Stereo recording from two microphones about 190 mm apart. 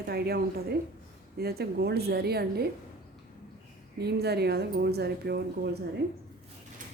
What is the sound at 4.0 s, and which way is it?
Speech, 60° right (ahead or behind).